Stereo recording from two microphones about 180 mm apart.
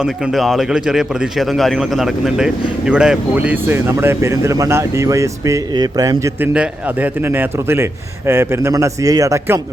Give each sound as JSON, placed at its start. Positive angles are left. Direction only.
{"t": 0.0, "sound": "speech", "side_deg": 0}